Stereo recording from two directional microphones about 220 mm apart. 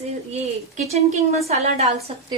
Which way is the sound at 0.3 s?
30° right (ahead or behind).